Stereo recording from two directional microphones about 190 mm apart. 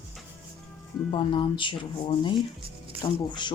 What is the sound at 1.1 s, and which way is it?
Speech, 25° left (ahead or behind).